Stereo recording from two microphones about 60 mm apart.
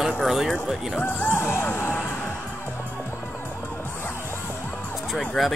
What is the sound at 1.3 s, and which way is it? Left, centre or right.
Music, left.